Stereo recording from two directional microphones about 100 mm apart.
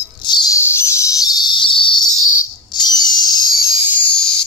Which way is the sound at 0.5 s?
25° left (ahead or behind).